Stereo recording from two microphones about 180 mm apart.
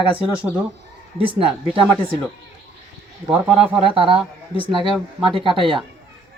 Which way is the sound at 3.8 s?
30° right (ahead or behind).